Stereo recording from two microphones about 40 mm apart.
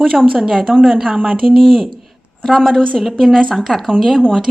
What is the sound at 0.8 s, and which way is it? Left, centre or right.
Speech, centre.